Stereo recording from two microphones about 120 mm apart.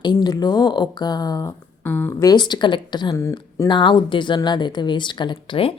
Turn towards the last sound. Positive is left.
turn(degrees=45)  # may be behind; listen again after turning